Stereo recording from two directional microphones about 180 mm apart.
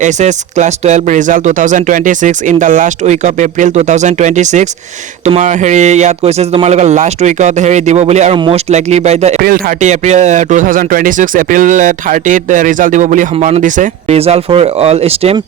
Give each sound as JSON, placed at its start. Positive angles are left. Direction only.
{"t": 0.0, "sound": "speech", "side_deg": -40}
{"t": 9.4, "sound": "speech", "side_deg": -55}